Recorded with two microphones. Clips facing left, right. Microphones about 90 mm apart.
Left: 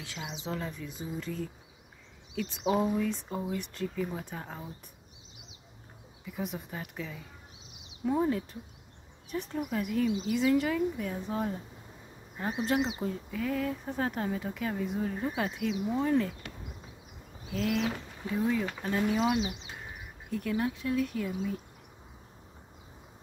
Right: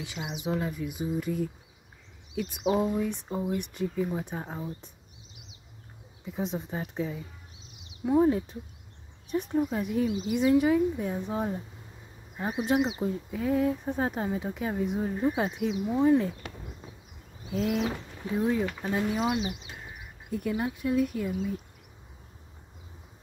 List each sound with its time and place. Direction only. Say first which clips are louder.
0.0 s speech: right 5 dB; 15° right (ahead or behind)
3.0 s speech: right 2 dB; 20° right (ahead or behind)
6.2 s speech: right 4 dB; 20° right (ahead or behind)
17.5 s speech: right 2 dB; 20° right (ahead or behind)